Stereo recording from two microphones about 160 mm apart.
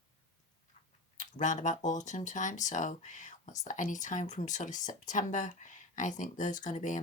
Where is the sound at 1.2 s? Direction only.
50° left (ahead or behind).